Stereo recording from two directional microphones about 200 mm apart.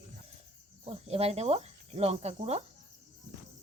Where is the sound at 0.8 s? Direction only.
30° right (ahead or behind).